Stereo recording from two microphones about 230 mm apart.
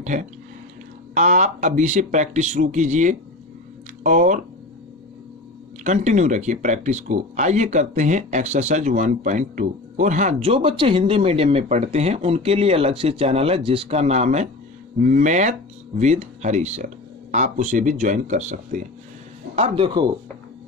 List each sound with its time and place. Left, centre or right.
0.0 s speech: right
5.9 s speech: right